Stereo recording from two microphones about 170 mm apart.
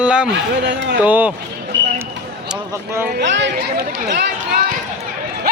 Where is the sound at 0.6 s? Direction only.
90° right.